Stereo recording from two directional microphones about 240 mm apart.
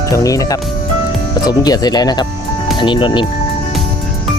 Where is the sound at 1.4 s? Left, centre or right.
Centre.